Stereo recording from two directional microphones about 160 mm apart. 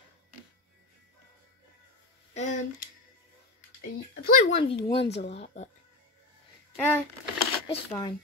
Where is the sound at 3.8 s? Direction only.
70° left (ahead or behind).